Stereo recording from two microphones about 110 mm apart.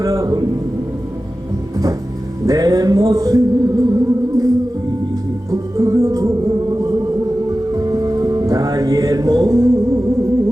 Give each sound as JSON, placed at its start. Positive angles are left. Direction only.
{"t": 0.0, "sound": "a man's voice", "side_deg": -30}
{"t": 2.5, "sound": "music", "side_deg": -35}